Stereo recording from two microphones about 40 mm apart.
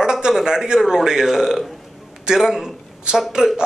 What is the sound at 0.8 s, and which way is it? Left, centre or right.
A man's voice, centre.